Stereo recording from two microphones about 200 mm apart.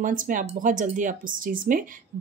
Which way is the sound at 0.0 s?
40° right (ahead or behind).